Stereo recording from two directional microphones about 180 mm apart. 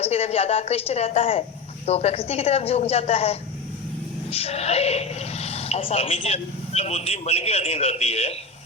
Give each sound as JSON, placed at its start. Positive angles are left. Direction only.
{"t": 0.0, "sound": "speech", "side_deg": 35}